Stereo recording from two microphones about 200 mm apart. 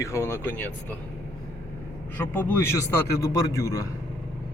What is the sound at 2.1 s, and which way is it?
Speech, 10° left (ahead or behind).